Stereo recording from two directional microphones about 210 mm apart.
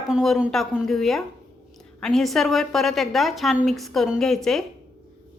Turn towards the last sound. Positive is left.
turn(degrees=0)  # may be behind; listen again after turning